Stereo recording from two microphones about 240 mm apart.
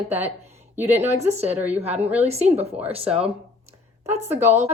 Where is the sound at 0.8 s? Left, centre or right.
Centre.